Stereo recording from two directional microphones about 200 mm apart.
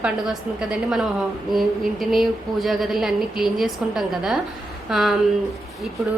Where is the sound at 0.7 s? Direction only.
5° right (ahead or behind).